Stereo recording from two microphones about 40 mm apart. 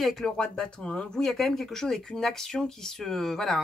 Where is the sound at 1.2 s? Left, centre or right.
Centre.